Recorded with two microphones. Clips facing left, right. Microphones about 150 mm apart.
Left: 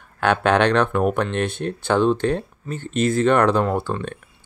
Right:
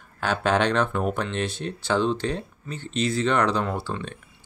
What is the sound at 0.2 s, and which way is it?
Speech, 65° left (ahead or behind).